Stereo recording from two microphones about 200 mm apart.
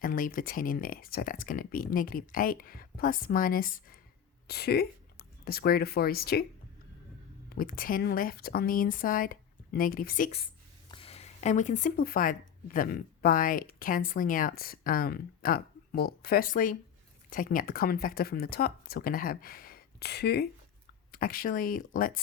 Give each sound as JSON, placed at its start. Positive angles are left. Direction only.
{"t": 0.0, "sound": "a woman's voice", "side_deg": 45}
{"t": 7.5, "sound": "speech", "side_deg": 45}
{"t": 10.9, "sound": "speech", "side_deg": 30}